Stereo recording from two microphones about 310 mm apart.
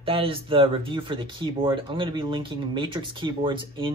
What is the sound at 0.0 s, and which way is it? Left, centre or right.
Speech, centre.